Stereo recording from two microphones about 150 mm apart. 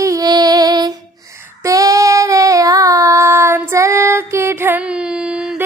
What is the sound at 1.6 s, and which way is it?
Child singing, 20° right (ahead or behind).